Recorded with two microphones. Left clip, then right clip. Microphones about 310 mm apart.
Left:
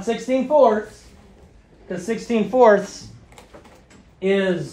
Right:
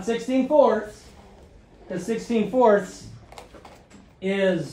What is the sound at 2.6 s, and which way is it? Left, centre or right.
Speech, left.